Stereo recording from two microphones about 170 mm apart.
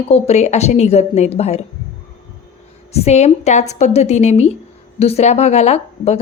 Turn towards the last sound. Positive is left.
turn(degrees=40)  # may be behind; listen again after turning